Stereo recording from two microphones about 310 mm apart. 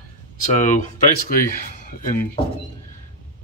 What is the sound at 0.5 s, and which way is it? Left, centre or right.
Speech, left.